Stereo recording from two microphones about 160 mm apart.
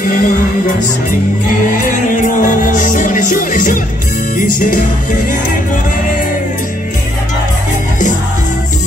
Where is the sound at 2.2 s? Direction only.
55° left (ahead or behind).